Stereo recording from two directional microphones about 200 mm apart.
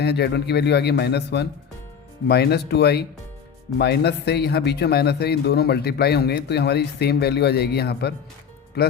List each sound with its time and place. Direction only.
0.0 s a man's voice: 55° left (ahead or behind)